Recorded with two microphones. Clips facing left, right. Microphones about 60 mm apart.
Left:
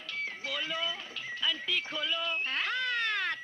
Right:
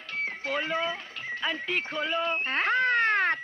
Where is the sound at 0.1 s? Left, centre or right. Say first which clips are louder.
Right 6 dB; right.